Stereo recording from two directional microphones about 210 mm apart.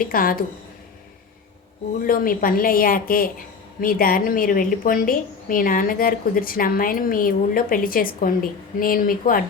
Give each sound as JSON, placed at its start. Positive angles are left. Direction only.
{"t": 0.0, "sound": "a woman's voice", "side_deg": 45}
{"t": 2.0, "sound": "a woman's voice", "side_deg": 45}